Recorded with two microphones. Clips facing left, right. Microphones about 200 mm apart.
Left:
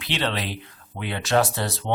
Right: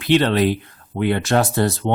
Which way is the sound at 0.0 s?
50° right (ahead or behind).